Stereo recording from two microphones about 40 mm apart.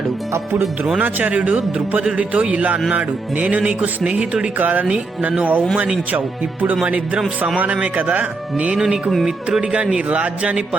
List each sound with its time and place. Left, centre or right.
1.2 s music: right
2.1 s speech: right
2.9 s music: right
4.5 s speech: right
6.8 s music: right
8.8 s speech: centre